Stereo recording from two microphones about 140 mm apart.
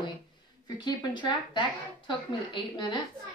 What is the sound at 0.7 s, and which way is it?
A woman's voice, 30° left (ahead or behind).